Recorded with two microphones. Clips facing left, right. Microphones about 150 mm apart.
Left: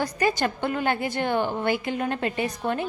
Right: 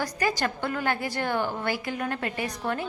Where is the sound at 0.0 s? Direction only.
25° left (ahead or behind).